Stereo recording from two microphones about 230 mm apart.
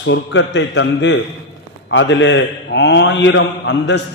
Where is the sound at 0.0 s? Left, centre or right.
Left.